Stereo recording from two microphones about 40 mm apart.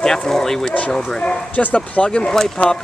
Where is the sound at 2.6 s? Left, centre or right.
Left.